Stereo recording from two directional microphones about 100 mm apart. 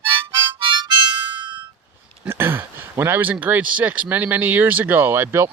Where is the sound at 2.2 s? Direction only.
25° right (ahead or behind).